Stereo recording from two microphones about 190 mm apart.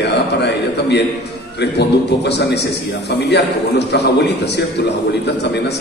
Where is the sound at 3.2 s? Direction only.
60° left (ahead or behind).